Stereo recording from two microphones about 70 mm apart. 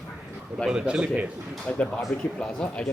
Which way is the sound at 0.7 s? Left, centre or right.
Centre.